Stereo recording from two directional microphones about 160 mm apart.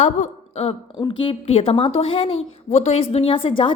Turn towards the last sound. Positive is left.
turn(degrees=30)  # may be behind; listen again after turning